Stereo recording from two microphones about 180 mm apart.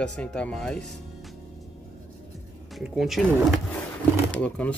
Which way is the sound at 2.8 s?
Centre (ahead or behind).